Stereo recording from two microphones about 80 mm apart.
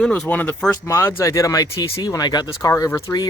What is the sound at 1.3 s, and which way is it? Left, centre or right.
Speech, left.